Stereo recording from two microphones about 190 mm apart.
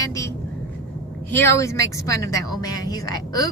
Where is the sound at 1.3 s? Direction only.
15° left (ahead or behind).